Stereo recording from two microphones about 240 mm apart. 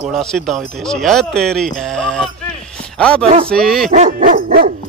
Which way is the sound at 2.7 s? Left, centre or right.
Centre.